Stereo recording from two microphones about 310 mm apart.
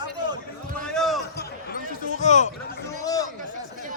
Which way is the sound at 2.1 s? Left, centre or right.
Left.